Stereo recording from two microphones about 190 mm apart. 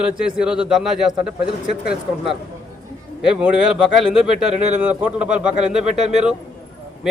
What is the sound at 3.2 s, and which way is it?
Speech, 5° right (ahead or behind).